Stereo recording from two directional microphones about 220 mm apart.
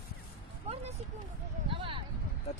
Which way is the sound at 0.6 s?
30° right (ahead or behind).